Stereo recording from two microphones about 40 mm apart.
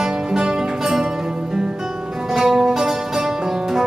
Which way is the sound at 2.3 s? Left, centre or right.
Centre.